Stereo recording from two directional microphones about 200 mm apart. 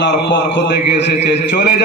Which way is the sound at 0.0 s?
60° left (ahead or behind).